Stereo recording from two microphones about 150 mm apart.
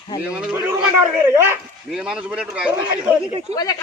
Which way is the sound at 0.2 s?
10° right (ahead or behind).